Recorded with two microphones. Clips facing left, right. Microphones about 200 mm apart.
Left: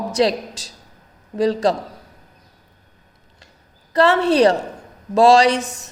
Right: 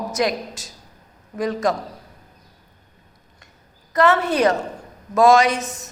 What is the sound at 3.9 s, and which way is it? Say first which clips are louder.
A woman's voice: left 3 dB; 30° left (ahead or behind).